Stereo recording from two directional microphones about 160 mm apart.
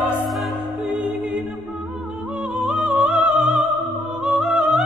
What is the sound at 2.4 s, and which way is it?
Music, 5° right (ahead or behind).